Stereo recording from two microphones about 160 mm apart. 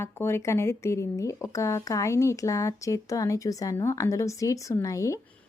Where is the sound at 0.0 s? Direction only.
15° left (ahead or behind).